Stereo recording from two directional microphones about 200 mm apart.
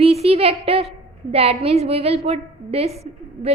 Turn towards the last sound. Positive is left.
turn(degrees=-30)  # may be behind; listen again after turning